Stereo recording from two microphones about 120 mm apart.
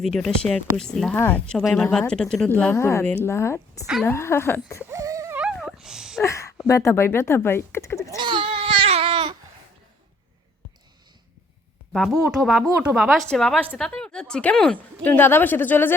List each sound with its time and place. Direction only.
0.0 s speech: 5° left (ahead or behind)
1.1 s a woman's voice: 20° left (ahead or behind)
1.5 s a woman's voice: 5° left (ahead or behind)
4.9 s a sound: 25° right (ahead or behind)
5.5 s dog: 5° right (ahead or behind)
6.2 s speech: 25° left (ahead or behind)
8.0 s baby cry: 35° right (ahead or behind); by 9.3 s 50° right (ahead or behind)
12.2 s a woman's voice: 5° right (ahead or behind); by 16.0 s 15° left (ahead or behind)